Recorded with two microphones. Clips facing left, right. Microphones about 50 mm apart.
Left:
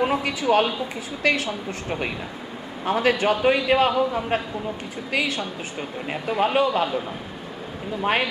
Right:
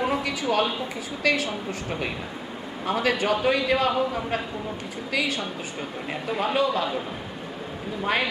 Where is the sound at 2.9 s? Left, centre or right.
Centre.